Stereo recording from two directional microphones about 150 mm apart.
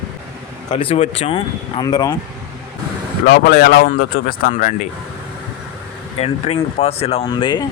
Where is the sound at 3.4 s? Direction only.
90° left; by 4.7 s 65° left (ahead or behind).